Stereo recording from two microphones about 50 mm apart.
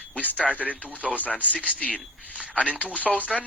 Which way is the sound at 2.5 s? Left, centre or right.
Right.